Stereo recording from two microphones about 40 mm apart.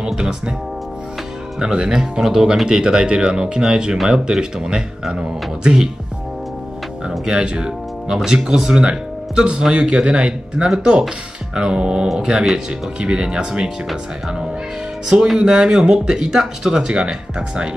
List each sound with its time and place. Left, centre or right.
0.1 s speech: centre
1.6 s speech: right
7.1 s speech: right
15.3 s speech: centre